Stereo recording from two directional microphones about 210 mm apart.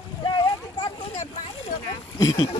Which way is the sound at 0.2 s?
20° left (ahead or behind).